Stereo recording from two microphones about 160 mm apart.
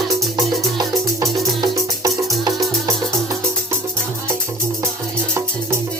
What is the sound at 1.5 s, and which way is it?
Music, 20° right (ahead or behind).